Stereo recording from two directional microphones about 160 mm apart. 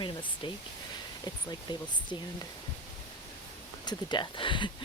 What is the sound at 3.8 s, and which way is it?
Speech, 25° left (ahead or behind).